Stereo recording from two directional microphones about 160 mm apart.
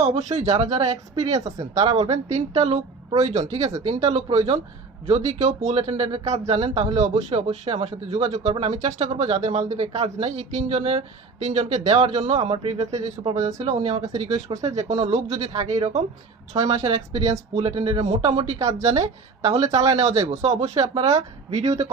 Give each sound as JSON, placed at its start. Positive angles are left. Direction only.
{"t": 0.0, "sound": "speech", "side_deg": -45}
{"t": 18.4, "sound": "speech", "side_deg": -45}
{"t": 20.1, "sound": "speech", "side_deg": -20}
{"t": 20.3, "sound": "speech", "side_deg": -45}